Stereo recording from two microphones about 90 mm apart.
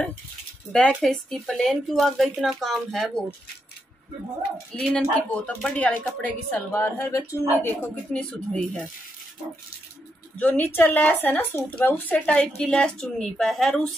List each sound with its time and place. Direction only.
1.0 s a woman's voice: 5° left (ahead or behind)
4.7 s a woman's voice: 10° left (ahead or behind)
6.7 s a woman's voice: 25° left (ahead or behind)
7.6 s a woman's voice: 15° left (ahead or behind)
10.4 s a woman's voice: 20° left (ahead or behind); by 13.9 s 5° left (ahead or behind)